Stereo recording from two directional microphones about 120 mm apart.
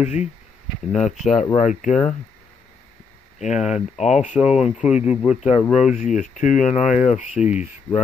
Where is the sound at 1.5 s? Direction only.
90° left.